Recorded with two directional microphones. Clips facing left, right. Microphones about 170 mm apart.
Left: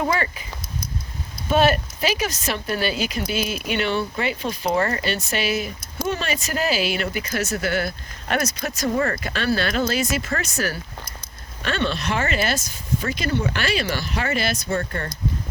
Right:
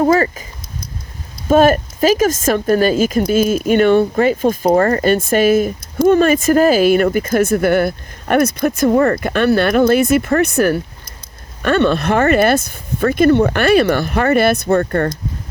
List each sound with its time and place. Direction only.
0.0 s speech: 40° right (ahead or behind)
1.5 s speech: 45° right (ahead or behind)